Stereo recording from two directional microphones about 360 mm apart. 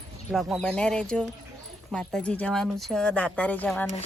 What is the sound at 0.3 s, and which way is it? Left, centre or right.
Speech, centre.